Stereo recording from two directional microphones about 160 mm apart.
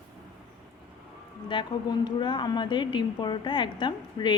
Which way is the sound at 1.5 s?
30° left (ahead or behind).